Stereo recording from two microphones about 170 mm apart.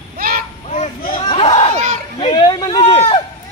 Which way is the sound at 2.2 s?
25° left (ahead or behind).